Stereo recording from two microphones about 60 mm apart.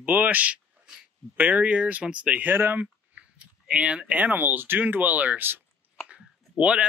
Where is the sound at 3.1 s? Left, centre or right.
Centre.